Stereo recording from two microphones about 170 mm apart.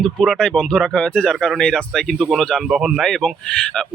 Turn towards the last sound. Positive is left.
turn(degrees=5)  # may be behind; listen again after turning